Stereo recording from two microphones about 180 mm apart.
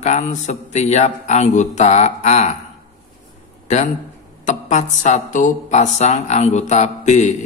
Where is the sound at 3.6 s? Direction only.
40° left (ahead or behind).